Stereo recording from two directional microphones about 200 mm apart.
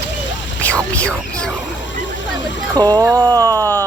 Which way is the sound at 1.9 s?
65° left (ahead or behind).